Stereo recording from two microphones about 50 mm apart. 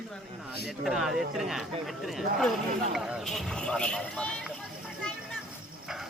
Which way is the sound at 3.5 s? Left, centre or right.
Centre.